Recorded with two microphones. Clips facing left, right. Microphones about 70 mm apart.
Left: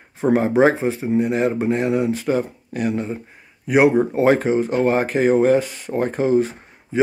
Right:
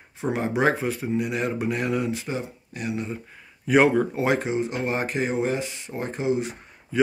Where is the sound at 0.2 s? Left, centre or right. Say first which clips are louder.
Left 8 dB; left.